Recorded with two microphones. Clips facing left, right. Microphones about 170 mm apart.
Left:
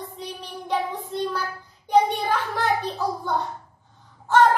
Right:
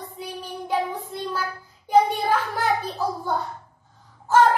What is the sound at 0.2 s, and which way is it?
Child singing, 5° right (ahead or behind).